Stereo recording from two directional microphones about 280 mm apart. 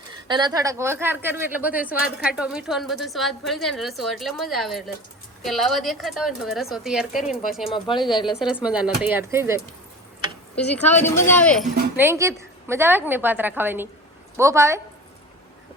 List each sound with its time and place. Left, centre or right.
0.3 s a woman's voice: centre
10.5 s speech: left
11.0 s speech: centre